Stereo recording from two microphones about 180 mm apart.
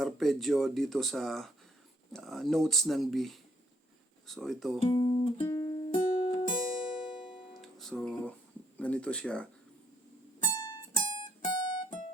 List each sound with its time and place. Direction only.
0.0 s speech: centre (ahead or behind)
4.8 s speech: 25° left (ahead or behind)
5.5 s music: 20° left (ahead or behind)
7.5 s music: centre (ahead or behind)
8.8 s speech: 5° left (ahead or behind)
10.5 s music: 20° left (ahead or behind)